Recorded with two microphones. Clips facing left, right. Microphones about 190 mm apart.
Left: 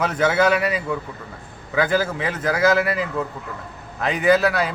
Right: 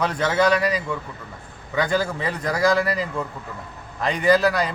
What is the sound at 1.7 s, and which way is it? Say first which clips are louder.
A man's voice: left 2 dB; 5° left (ahead or behind).